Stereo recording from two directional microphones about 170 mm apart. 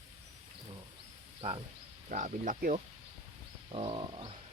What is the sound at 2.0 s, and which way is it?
Speech, 45° right (ahead or behind).